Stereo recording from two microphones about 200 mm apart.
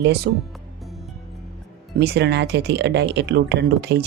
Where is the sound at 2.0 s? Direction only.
55° right (ahead or behind).